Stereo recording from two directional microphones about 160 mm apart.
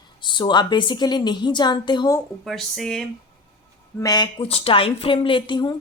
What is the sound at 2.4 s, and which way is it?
Speech, centre (ahead or behind).